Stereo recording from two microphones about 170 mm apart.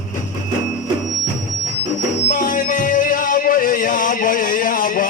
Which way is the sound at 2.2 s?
50° left (ahead or behind).